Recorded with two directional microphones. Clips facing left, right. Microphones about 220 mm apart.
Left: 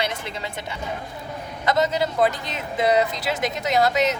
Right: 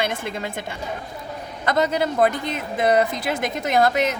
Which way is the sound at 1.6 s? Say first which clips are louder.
Right 1 dB; 55° right (ahead or behind).